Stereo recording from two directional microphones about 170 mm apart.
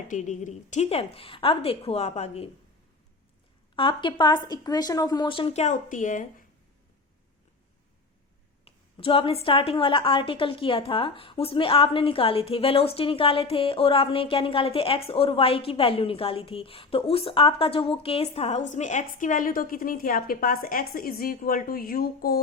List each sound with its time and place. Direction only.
0.1 s a woman's voice: 45° left (ahead or behind)
3.8 s speech: 30° left (ahead or behind); by 6.4 s 50° left (ahead or behind)
8.6 s a woman's voice: 35° left (ahead or behind); by 22.4 s 60° left (ahead or behind)